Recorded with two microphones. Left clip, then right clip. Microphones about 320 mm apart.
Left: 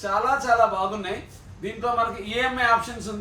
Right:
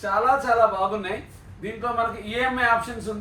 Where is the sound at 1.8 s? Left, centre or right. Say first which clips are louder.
Left 1 dB; centre.